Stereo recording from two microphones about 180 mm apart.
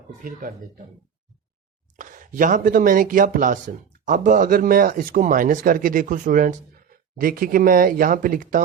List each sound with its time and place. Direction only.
0.3 s speech: 50° right (ahead or behind)
2.0 s speech: 45° right (ahead or behind)